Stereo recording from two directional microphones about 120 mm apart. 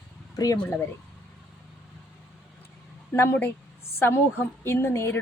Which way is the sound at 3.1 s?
20° left (ahead or behind).